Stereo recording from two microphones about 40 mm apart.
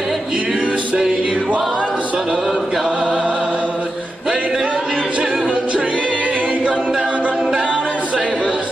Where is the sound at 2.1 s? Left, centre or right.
Centre.